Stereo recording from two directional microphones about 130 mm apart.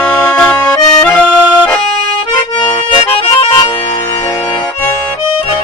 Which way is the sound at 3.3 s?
40° left (ahead or behind).